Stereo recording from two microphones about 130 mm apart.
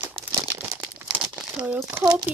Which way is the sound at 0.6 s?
10° right (ahead or behind).